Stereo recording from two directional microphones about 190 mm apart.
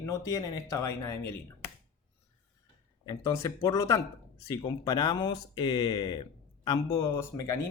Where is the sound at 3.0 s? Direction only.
20° left (ahead or behind).